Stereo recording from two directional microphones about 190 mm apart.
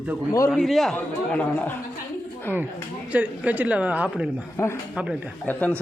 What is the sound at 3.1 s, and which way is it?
A woman's voice, 5° right (ahead or behind).